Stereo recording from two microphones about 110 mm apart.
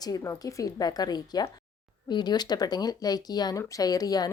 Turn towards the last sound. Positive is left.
turn(degrees=35)  # may be behind; listen again after turning